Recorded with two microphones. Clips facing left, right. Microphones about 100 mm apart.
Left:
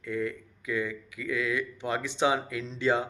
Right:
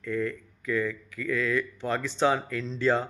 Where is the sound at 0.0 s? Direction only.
15° left (ahead or behind).